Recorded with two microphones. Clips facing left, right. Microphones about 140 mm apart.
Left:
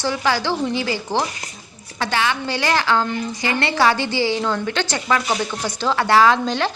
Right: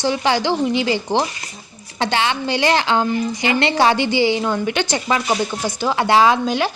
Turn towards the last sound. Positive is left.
turn(degrees=-10)  # may be behind; listen again after turning